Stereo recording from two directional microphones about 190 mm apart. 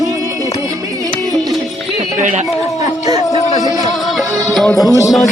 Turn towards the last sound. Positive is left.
turn(degrees=0)  # may be behind; listen again after turning